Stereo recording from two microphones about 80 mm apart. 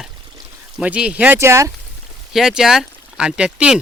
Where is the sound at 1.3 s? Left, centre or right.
Right.